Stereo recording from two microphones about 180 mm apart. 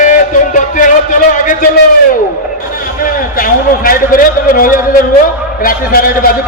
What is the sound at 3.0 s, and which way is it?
A man's voice, 50° left (ahead or behind).